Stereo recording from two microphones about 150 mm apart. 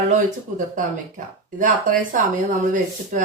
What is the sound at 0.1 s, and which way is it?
A woman's voice, 55° right (ahead or behind).